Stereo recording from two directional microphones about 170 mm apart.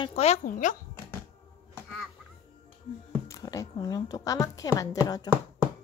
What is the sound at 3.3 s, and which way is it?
A woman's voice, 20° left (ahead or behind).